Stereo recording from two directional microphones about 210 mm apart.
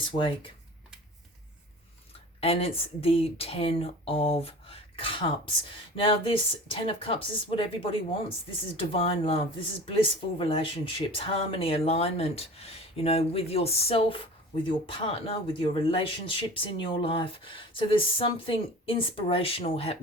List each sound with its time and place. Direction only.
0.0 s a woman's voice: 25° left (ahead or behind)
2.4 s a woman's voice: 30° left (ahead or behind)